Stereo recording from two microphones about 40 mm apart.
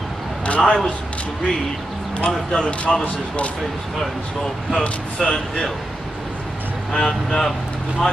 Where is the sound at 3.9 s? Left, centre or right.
Centre.